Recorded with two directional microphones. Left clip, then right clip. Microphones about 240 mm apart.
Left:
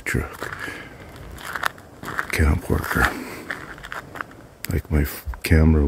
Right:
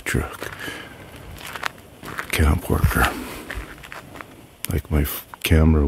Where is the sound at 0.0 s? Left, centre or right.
Centre.